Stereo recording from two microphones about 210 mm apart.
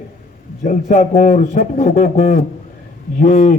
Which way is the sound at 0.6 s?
30° left (ahead or behind).